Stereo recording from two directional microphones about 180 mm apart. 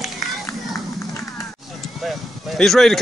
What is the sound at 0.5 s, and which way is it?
Run, 15° left (ahead or behind).